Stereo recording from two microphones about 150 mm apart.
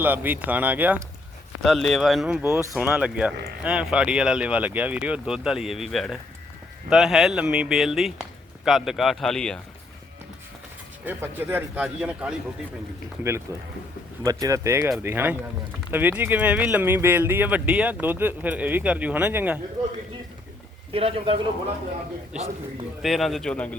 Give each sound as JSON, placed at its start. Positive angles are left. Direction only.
{"t": 0.0, "sound": "speech", "side_deg": -10}
{"t": 1.6, "sound": "speech", "side_deg": 0}
{"t": 11.0, "sound": "speech", "side_deg": -10}
{"t": 13.5, "sound": "speech", "side_deg": -20}
{"t": 20.9, "sound": "a man's voice", "side_deg": -40}
{"t": 23.0, "sound": "speech", "side_deg": 0}